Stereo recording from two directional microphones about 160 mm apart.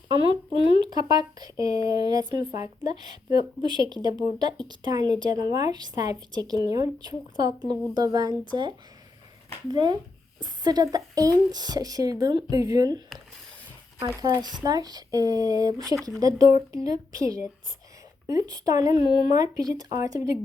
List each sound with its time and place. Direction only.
0.1 s speech: 30° right (ahead or behind)
9.6 s speech: 25° right (ahead or behind)
14.2 s speech: 25° right (ahead or behind)